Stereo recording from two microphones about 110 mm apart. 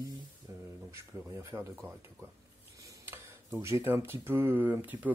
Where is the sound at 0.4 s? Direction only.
40° right (ahead or behind).